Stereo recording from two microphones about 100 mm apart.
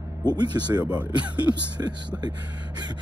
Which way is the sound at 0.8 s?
15° right (ahead or behind).